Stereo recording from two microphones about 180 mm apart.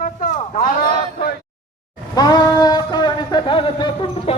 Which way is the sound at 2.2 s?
20° left (ahead or behind).